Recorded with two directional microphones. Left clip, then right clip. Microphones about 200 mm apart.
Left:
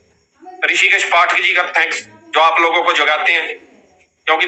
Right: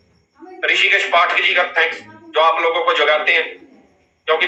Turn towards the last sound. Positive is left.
turn(degrees=45)  # may be behind; listen again after turning